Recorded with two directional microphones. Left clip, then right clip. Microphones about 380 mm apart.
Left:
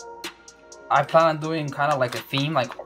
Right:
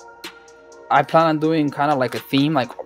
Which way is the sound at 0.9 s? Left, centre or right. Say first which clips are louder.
Right 3 dB; right.